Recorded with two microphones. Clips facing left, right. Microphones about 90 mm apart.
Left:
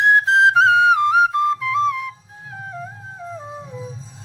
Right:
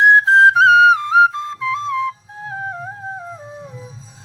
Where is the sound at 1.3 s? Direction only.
25° right (ahead or behind).